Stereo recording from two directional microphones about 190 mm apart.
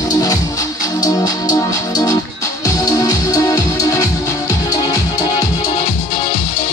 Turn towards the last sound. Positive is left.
turn(degrees=15)  # may be behind; listen again after turning